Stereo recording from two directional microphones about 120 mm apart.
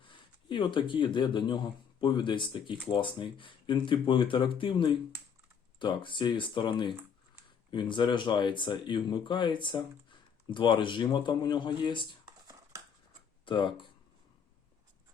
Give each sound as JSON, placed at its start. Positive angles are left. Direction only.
{"t": 0.0, "sound": "speech", "side_deg": 40}
{"t": 13.4, "sound": "speech", "side_deg": 40}